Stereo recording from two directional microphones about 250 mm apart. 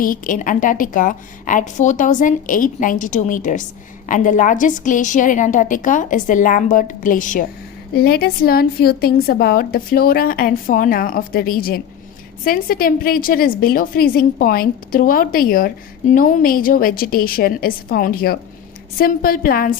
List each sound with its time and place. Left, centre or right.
0.0 s a woman's voice: left